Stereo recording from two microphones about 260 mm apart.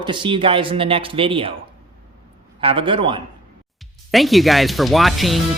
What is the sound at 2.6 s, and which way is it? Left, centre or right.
Speech, centre.